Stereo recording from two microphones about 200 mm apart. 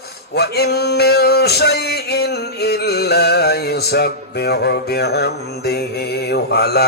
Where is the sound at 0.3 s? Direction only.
55° left (ahead or behind).